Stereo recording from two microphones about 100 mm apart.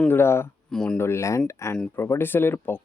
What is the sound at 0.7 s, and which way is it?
Speech, 5° left (ahead or behind).